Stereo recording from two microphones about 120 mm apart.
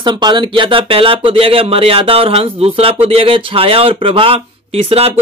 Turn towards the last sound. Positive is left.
turn(degrees=-50)  # may be behind; listen again after turning